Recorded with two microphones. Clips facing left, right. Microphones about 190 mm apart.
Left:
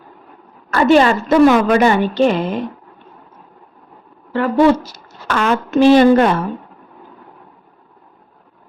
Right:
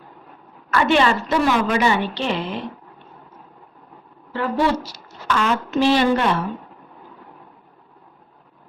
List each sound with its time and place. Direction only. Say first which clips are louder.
0.7 s a woman's voice: left 6 dB; 40° left (ahead or behind)
4.3 s a woman's voice: left 8 dB; 55° left (ahead or behind)